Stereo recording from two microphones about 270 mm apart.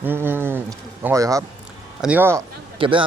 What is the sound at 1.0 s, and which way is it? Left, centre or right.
A man's voice, centre.